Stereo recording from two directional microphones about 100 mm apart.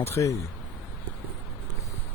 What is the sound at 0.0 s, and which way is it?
Speech, 30° left (ahead or behind).